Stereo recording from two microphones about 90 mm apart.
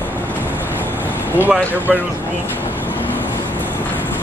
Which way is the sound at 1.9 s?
Centre (ahead or behind).